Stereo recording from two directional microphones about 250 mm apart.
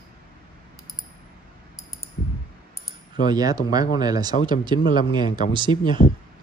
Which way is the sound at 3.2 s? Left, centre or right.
Centre.